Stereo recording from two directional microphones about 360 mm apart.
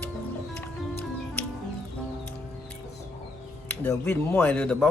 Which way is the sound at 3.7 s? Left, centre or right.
Centre.